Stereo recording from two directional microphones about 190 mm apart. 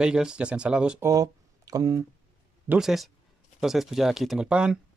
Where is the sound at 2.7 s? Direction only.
Centre (ahead or behind).